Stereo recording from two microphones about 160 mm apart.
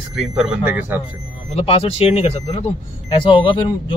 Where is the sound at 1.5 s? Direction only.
40° left (ahead or behind).